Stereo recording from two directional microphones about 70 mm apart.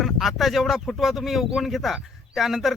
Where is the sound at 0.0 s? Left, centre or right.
Centre.